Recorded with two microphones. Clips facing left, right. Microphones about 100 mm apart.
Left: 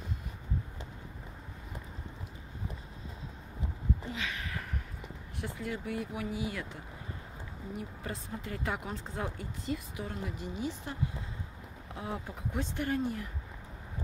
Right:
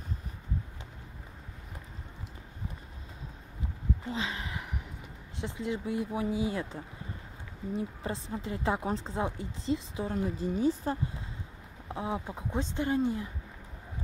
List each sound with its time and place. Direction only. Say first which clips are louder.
4.1 s a sound: right 3 dB; 25° right (ahead or behind)
5.4 s speech: right 4 dB; 25° right (ahead or behind)
11.9 s speech: right 5 dB; 25° right (ahead or behind)